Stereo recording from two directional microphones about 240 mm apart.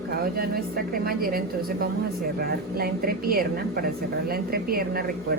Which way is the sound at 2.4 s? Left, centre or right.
Right.